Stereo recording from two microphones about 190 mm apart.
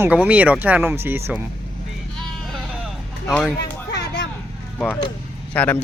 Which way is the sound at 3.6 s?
60° left (ahead or behind).